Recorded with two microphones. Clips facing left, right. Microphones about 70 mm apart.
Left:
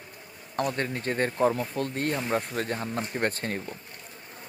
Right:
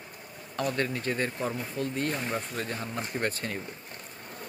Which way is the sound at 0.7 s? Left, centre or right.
Left.